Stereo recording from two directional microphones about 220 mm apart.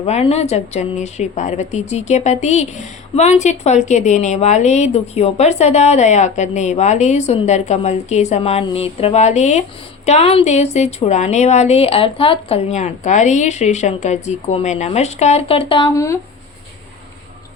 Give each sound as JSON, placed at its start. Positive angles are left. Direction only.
{"t": 0.0, "sound": "speech", "side_deg": 30}